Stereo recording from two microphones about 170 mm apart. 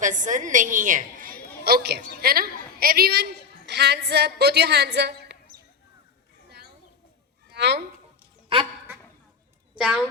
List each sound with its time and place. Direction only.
0.0 s a woman's voice: 50° right (ahead or behind)
1.6 s a woman's voice: 65° right (ahead or behind)
3.7 s a woman's voice: 85° right
7.5 s speech: 85° right
8.5 s speech: 30° right (ahead or behind)
9.7 s a child's voice: 5° right (ahead or behind)